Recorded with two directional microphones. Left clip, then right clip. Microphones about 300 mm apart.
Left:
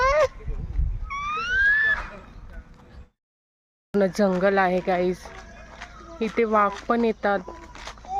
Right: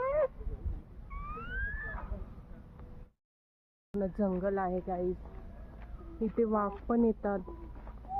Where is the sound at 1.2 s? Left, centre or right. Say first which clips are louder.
Left 16 dB; left.